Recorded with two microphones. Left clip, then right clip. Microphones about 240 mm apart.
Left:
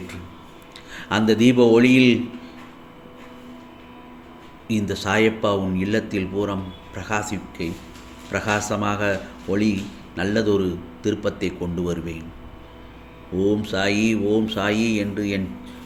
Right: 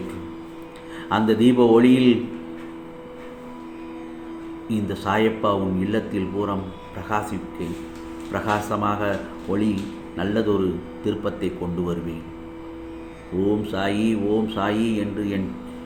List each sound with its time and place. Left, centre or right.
1.1 s speech: left
4.7 s speech: left
13.6 s speech: left